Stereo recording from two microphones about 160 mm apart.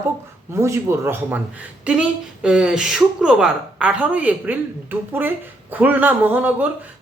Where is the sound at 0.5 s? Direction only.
15° right (ahead or behind).